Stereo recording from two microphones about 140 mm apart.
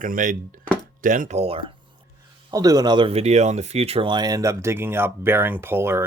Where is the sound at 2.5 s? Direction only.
25° right (ahead or behind).